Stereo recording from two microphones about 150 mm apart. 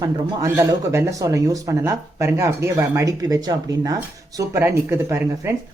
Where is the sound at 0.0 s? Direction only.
20° right (ahead or behind).